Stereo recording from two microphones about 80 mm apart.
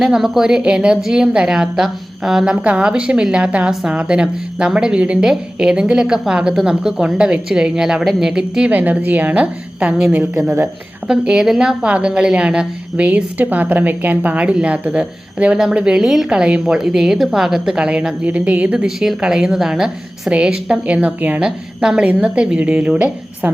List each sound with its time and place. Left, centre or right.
0.0 s a woman's voice: centre